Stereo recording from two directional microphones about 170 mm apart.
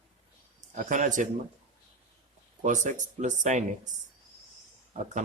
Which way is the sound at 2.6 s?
45° right (ahead or behind).